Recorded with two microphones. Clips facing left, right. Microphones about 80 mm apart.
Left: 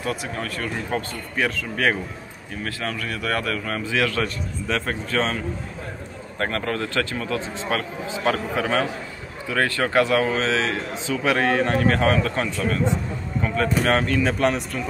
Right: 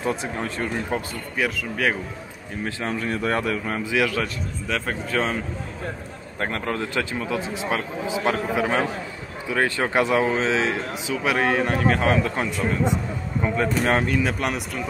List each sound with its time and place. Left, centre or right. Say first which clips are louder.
0.0 s speech: right 2 dB; right
1.3 s speech: left 1 dB; centre
2.6 s a man's voice: right 2 dB; right
6.4 s a man's voice: left 1 dB; centre